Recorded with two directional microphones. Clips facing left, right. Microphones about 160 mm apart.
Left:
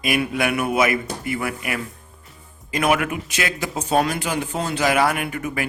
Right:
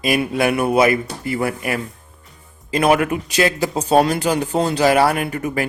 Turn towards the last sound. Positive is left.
turn(degrees=-35)  # may be behind; listen again after turning